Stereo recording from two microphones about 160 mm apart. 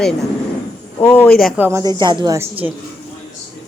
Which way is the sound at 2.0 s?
25° right (ahead or behind).